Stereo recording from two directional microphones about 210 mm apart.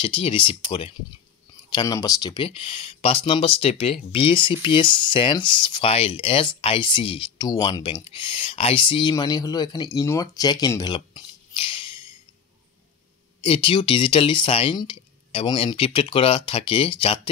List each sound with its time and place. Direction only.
0.0 s speech: 25° left (ahead or behind)
13.4 s speech: 25° left (ahead or behind)